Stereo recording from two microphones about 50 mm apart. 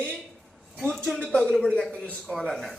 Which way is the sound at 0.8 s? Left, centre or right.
Centre.